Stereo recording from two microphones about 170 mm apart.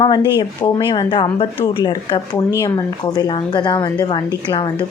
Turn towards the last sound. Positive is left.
turn(degrees=25)  # may be behind; listen again after turning